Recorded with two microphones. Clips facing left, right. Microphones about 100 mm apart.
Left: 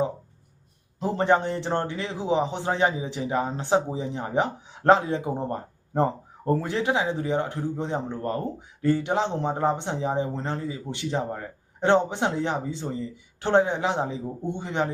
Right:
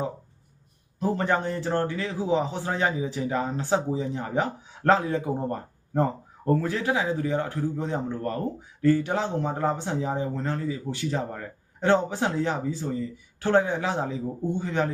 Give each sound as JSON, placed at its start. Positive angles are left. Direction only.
{"t": 0.9, "sound": "a man's voice", "side_deg": 25}